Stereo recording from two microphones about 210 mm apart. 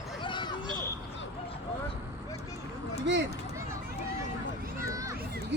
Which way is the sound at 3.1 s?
55° right (ahead or behind).